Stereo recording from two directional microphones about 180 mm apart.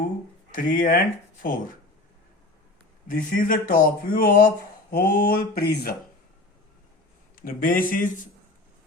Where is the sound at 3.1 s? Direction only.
50° left (ahead or behind).